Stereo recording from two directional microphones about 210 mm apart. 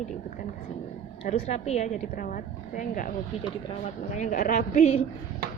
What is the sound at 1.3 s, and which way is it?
A woman's voice, 30° left (ahead or behind).